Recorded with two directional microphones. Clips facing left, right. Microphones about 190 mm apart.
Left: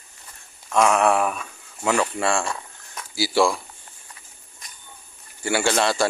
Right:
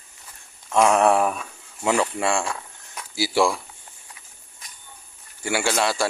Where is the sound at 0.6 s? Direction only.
25° right (ahead or behind).